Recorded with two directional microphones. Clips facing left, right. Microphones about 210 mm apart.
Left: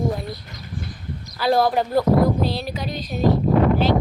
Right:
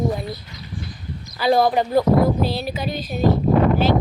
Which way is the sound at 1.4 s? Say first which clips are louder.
Right 2 dB; centre (ahead or behind).